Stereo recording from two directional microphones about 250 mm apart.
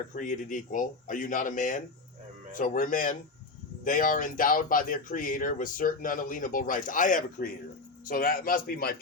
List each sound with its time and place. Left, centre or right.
0.1 s speech: left